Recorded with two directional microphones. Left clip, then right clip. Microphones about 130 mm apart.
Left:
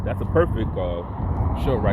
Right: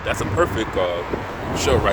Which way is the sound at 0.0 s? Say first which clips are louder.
Right 2 dB; 30° right (ahead or behind).